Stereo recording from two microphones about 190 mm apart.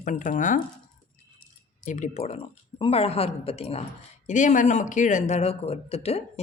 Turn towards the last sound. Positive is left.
turn(degrees=30)  # may be behind; listen again after turning